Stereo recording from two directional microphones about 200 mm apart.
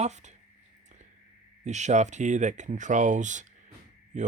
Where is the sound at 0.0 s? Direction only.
35° right (ahead or behind).